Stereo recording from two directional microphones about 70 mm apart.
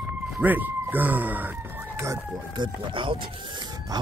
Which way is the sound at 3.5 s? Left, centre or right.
Right.